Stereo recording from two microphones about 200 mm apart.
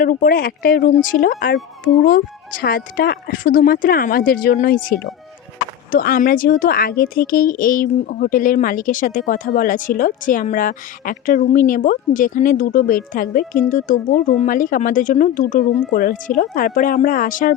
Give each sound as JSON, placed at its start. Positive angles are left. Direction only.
{"t": 0.0, "sound": "speech", "side_deg": 45}